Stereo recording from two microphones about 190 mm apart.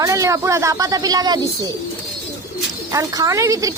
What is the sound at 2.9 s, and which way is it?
Speech, 15° right (ahead or behind).